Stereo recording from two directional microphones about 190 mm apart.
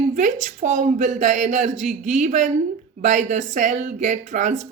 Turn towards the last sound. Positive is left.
turn(degrees=-40)  # may be behind; listen again after turning